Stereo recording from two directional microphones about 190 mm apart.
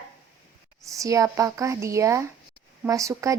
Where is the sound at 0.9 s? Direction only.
15° right (ahead or behind).